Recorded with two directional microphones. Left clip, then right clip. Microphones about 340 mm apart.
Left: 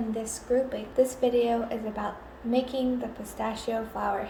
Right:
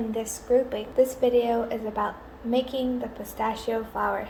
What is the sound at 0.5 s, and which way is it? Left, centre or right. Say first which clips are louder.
A woman's voice: right 3 dB; centre.